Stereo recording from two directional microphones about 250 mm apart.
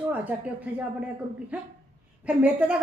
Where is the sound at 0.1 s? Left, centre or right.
Centre.